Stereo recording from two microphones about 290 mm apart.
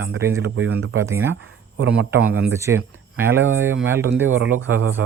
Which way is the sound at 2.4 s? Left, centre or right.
Centre.